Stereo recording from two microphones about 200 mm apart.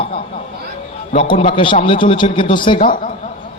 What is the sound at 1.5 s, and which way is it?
A man's voice, 25° left (ahead or behind).